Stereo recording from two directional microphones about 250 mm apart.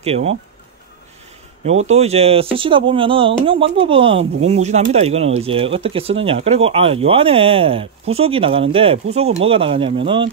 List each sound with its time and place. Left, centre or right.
0.0 s speech: right
1.9 s speech: right